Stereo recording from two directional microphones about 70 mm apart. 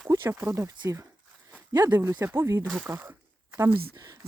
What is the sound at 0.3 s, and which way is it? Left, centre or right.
Speech, right.